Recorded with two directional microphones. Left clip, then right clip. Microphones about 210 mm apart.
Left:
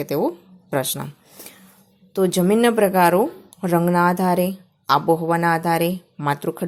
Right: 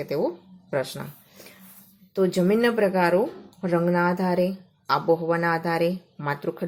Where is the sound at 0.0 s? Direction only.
35° left (ahead or behind).